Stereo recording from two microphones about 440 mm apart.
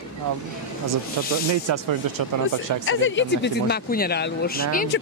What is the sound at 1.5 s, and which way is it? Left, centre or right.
Speech, right.